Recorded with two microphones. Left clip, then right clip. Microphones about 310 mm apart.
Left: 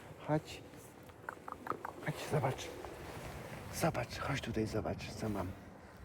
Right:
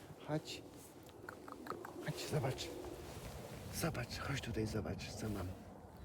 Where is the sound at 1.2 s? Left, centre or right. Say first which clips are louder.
Left 6 dB; centre.